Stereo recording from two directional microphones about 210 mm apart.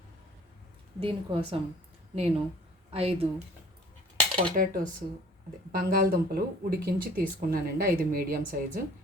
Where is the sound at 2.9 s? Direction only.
30° right (ahead or behind).